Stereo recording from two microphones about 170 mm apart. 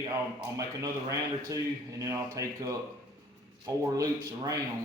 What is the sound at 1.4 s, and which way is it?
A man's voice, 20° right (ahead or behind).